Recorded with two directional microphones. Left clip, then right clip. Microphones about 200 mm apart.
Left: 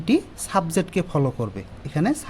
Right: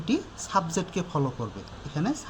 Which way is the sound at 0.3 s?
60° left (ahead or behind).